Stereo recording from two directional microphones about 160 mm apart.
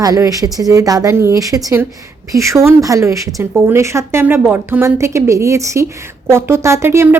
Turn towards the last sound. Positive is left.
turn(degrees=-15)  # may be behind; listen again after turning